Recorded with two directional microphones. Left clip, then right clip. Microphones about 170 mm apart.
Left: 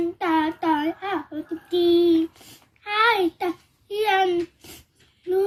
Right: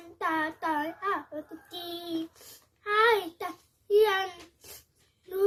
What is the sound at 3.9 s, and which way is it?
Speech, 15° right (ahead or behind).